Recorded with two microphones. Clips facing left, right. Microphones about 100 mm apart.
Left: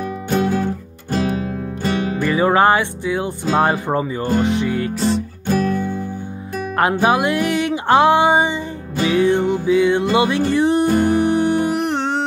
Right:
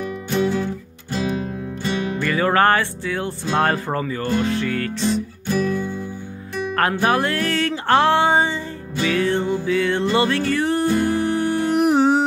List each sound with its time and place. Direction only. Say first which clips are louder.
0.3 s music: left 2 dB; 50° left (ahead or behind)
2.1 s music: left 3 dB; 15° left (ahead or behind)
5.5 s music: left 3 dB; 50° left (ahead or behind)
6.8 s music: left 3 dB; 15° left (ahead or behind)
11.7 s music: right 4 dB; 5° right (ahead or behind)